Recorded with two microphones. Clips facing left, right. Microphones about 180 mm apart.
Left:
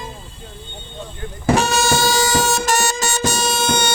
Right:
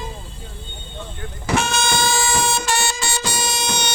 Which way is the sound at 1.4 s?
40° left (ahead or behind).